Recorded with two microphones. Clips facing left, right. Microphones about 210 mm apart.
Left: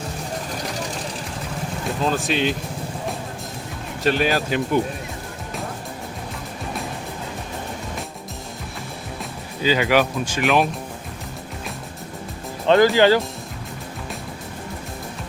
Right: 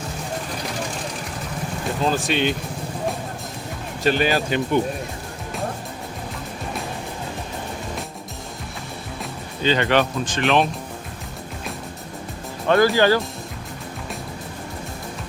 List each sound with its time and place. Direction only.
2.0 s speech: centre (ahead or behind)
4.0 s speech: centre (ahead or behind)
9.6 s speech: 5° left (ahead or behind)
12.6 s speech: 20° left (ahead or behind)